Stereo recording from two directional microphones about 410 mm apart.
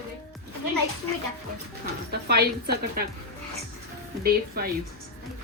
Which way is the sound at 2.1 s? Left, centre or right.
Right.